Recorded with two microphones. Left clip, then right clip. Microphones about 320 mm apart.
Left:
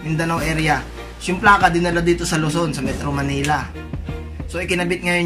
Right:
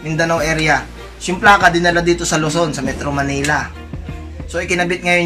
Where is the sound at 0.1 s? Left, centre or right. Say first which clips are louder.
Right 6 dB; centre.